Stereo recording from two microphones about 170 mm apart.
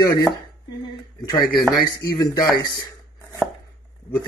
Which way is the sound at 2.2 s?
20° left (ahead or behind).